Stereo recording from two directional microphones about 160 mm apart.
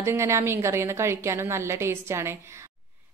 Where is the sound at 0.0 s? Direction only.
15° right (ahead or behind).